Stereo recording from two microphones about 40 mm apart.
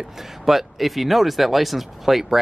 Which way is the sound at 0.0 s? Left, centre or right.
Centre.